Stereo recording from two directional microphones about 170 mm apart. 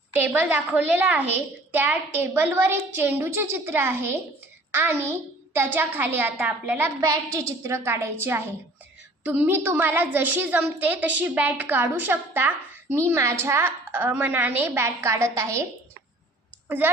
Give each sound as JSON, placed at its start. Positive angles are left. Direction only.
{"t": 0.2, "sound": "a woman's voice", "side_deg": -10}
{"t": 16.6, "sound": "speech", "side_deg": -10}